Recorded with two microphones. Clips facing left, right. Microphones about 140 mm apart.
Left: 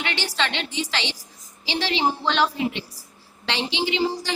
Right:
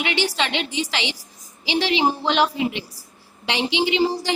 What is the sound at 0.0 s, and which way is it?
A woman's voice, 15° right (ahead or behind).